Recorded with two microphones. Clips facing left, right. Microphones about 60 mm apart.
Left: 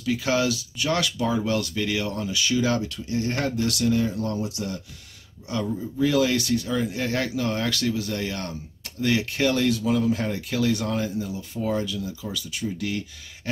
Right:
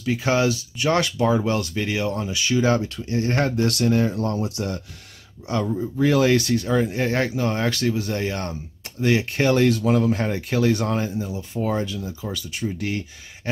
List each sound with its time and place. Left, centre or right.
0.0 s speech: right
5.9 s speech: right